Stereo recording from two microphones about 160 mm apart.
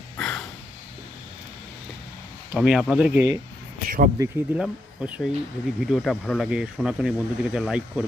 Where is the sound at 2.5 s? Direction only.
5° right (ahead or behind).